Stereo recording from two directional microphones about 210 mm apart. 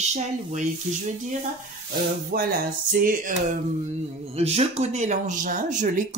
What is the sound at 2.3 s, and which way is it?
Music, 45° right (ahead or behind).